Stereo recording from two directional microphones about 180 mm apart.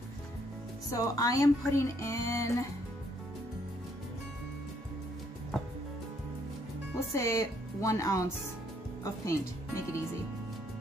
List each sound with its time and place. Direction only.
0.8 s speech: 20° left (ahead or behind)
7.0 s speech: 15° left (ahead or behind)